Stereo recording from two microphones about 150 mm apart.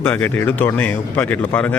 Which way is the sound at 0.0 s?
15° left (ahead or behind).